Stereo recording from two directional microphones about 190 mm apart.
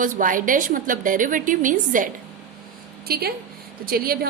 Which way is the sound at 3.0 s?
55° right (ahead or behind).